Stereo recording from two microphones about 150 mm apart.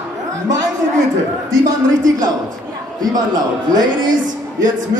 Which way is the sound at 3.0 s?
25° right (ahead or behind).